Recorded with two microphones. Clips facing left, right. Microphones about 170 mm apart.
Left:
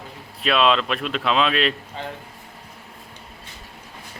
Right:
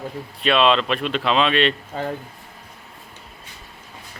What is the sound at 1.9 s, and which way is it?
Speech, 45° right (ahead or behind).